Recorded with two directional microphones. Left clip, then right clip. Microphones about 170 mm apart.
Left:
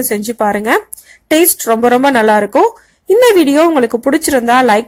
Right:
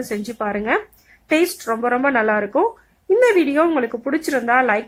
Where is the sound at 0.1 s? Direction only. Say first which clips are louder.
Left 11 dB; 30° left (ahead or behind).